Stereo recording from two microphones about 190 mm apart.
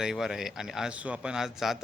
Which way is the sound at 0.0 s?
Centre (ahead or behind).